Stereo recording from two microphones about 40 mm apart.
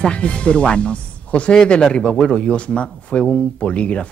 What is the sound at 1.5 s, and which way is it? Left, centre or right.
Speech, centre.